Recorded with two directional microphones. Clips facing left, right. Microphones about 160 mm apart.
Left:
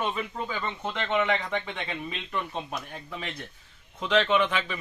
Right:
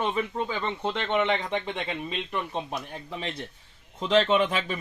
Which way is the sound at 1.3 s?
25° right (ahead or behind).